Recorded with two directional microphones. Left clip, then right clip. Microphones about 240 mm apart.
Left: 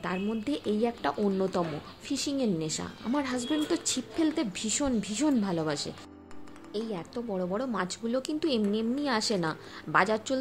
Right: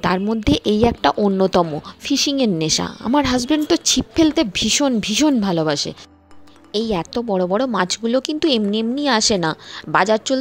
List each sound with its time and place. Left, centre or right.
0.0 s speech: right